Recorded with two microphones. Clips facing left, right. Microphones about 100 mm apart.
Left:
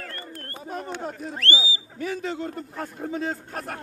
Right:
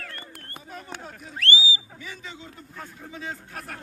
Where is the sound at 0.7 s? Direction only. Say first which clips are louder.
Left 8 dB; 55° left (ahead or behind).